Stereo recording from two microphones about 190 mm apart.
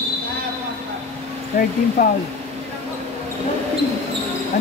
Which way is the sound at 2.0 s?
50° left (ahead or behind).